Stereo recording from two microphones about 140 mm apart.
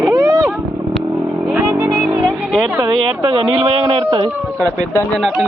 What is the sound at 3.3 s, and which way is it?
Speech, 40° right (ahead or behind).